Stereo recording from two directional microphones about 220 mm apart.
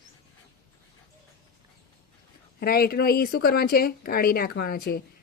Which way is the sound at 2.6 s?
45° left (ahead or behind).